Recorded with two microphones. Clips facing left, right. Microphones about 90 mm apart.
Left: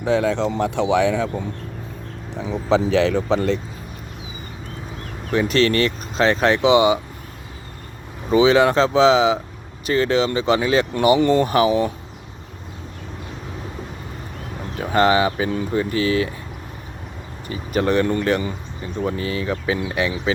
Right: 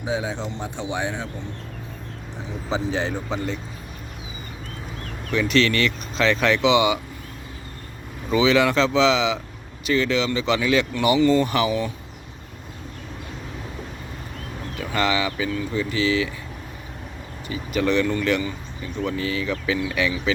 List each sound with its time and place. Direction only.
0.0 s speech: 70° left (ahead or behind); by 1.3 s 90° left
2.4 s speech: 90° left
5.3 s speech: 40° left (ahead or behind)
8.3 s speech: 30° left (ahead or behind)
11.2 s speech: 50° left (ahead or behind)
14.8 s speech: 40° left (ahead or behind)
17.5 s speech: 40° left (ahead or behind); by 20.3 s 25° left (ahead or behind)